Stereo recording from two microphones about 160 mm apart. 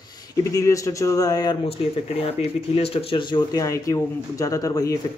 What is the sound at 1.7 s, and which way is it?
Speech, 40° left (ahead or behind).